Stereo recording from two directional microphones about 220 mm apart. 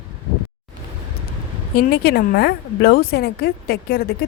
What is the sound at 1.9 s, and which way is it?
Speech, 45° left (ahead or behind).